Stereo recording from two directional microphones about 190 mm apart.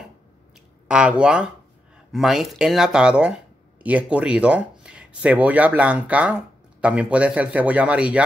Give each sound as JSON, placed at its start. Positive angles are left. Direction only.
{"t": 0.8, "sound": "speech", "side_deg": -5}